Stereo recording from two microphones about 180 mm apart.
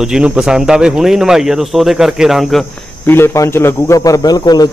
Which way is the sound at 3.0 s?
15° left (ahead or behind).